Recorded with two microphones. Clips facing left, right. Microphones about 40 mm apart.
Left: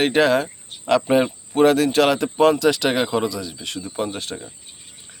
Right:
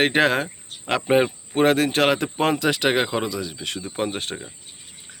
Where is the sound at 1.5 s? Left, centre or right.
Right.